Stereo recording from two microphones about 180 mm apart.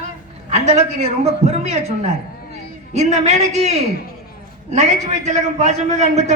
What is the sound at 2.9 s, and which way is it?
A man's voice, 40° right (ahead or behind).